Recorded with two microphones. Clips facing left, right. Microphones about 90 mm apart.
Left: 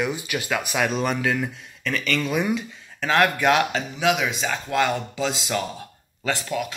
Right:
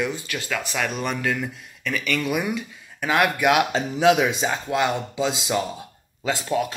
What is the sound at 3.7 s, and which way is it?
Speech, 30° right (ahead or behind).